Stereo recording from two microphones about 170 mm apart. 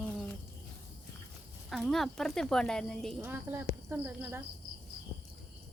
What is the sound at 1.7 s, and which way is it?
Speech, centre (ahead or behind).